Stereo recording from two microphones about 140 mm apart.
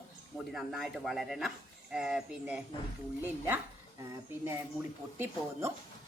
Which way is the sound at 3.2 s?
15° right (ahead or behind).